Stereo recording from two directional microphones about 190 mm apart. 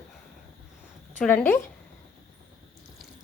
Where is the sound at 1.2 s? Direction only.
5° left (ahead or behind).